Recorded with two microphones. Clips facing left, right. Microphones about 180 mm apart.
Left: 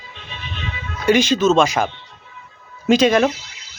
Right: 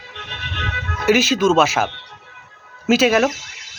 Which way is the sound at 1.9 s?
70° right (ahead or behind).